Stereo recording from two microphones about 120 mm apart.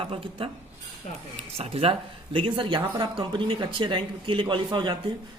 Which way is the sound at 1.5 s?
55° right (ahead or behind).